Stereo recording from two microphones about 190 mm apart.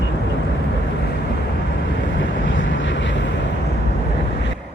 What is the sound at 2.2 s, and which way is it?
Vehicle, 75° left (ahead or behind).